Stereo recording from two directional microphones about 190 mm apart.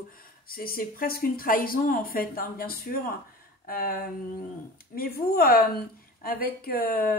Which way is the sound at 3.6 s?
50° left (ahead or behind).